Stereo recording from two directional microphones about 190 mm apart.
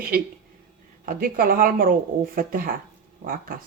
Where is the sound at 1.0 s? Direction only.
50° right (ahead or behind).